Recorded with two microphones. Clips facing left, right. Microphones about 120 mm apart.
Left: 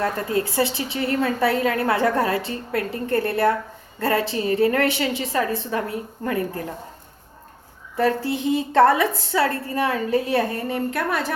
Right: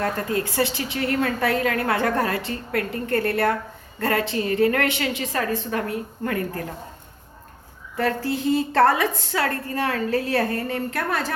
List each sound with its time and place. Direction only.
0.0 s a woman's voice: 30° left (ahead or behind)
7.9 s a woman's voice: 25° left (ahead or behind)